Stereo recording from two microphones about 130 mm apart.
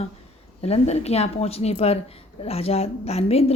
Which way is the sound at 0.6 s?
55° left (ahead or behind).